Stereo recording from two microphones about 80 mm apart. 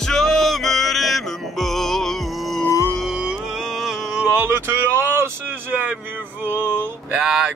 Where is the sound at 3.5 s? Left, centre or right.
Centre.